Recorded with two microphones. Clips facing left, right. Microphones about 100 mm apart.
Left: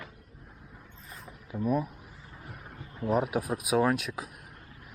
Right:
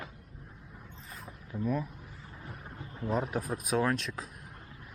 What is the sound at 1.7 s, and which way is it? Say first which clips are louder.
Speech: left 4 dB; 15° left (ahead or behind).